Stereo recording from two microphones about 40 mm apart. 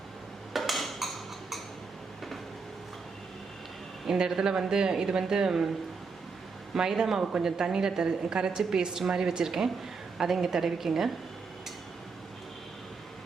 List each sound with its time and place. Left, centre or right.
0.5 s a sound: centre
4.0 s a woman's voice: centre
6.7 s a woman's voice: centre